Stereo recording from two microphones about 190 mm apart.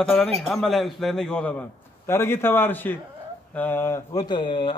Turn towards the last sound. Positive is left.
turn(degrees=25)  # may be behind; listen again after turning